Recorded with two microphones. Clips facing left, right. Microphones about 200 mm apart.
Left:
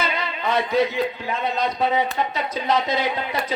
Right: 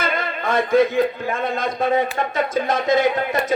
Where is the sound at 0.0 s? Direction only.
50° right (ahead or behind).